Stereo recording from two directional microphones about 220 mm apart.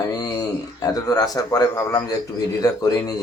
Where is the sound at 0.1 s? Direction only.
15° left (ahead or behind).